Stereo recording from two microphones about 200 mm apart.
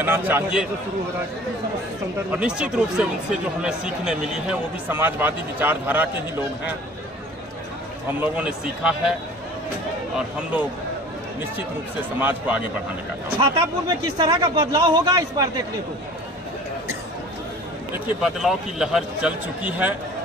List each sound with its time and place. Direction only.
0.0 s a man's voice: 10° right (ahead or behind)
2.3 s speech: 5° right (ahead or behind)
8.1 s speech: 10° right (ahead or behind)
10.1 s a man's voice: 10° right (ahead or behind)
12.2 s a man's voice: 10° right (ahead or behind)
14.0 s a man's voice: 20° right (ahead or behind)
18.2 s speech: centre (ahead or behind)